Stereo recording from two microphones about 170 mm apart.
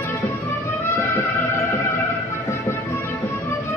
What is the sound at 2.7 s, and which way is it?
Music, 15° left (ahead or behind).